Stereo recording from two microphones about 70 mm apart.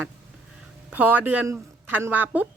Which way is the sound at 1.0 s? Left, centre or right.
Right.